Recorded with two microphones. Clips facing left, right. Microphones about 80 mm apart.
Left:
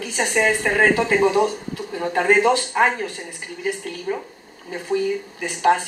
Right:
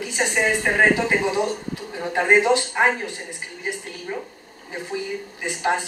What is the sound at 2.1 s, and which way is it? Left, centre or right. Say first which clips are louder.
Speech: left 1 dB; centre.